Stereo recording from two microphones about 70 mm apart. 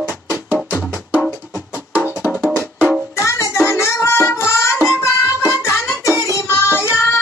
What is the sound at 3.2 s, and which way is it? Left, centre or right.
Child singing, left.